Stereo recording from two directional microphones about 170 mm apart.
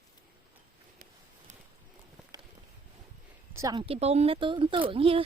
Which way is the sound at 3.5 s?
20° right (ahead or behind).